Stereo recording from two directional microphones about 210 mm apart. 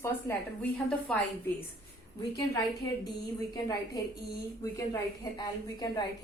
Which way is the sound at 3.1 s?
20° left (ahead or behind).